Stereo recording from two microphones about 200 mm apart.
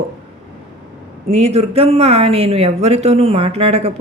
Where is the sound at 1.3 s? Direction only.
35° right (ahead or behind).